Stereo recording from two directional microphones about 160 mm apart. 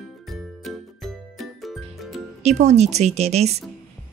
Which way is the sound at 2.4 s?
45° right (ahead or behind).